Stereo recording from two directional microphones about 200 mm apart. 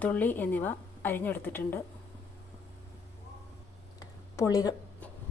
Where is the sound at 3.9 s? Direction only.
15° left (ahead or behind).